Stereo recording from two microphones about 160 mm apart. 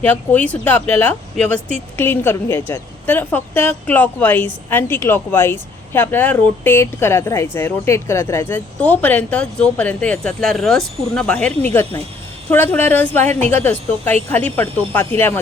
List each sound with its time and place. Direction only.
0.0 s a woman's voice: 10° left (ahead or behind)